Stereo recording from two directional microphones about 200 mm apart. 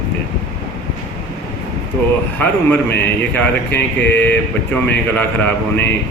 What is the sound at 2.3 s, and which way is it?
A man's voice, 5° left (ahead or behind).